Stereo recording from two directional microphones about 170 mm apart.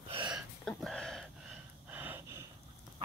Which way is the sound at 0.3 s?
Centre (ahead or behind).